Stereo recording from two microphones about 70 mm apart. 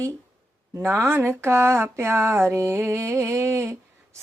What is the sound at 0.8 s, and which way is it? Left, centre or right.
Speech, right.